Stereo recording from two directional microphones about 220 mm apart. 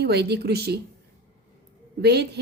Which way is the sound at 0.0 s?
50° right (ahead or behind).